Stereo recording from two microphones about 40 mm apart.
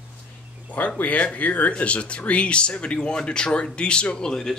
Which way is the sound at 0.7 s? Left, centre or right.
Left.